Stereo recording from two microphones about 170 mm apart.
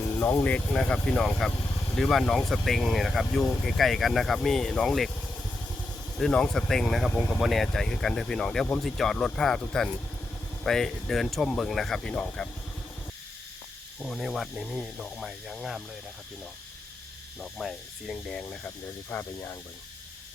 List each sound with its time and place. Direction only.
0.0 s speech: 10° left (ahead or behind)
6.1 s speech: 5° left (ahead or behind)
14.0 s speech: centre (ahead or behind)
17.4 s speech: centre (ahead or behind)
19.1 s speech: 15° left (ahead or behind)